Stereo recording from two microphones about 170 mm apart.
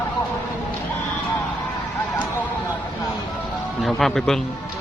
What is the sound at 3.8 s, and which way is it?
Speech, 5° left (ahead or behind).